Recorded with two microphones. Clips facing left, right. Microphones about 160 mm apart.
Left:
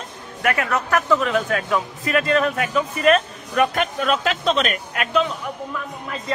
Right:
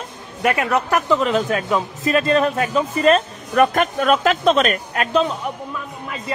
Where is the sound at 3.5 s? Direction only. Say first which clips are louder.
Right 4 dB; 45° right (ahead or behind).